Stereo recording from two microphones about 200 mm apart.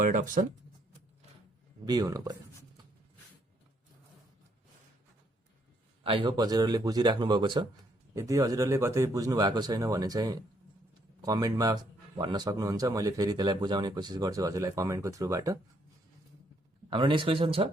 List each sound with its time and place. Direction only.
0.0 s speech: 40° right (ahead or behind)
1.8 s a man's voice: 20° right (ahead or behind)
6.0 s a man's voice: 25° right (ahead or behind)
16.9 s a man's voice: 25° right (ahead or behind)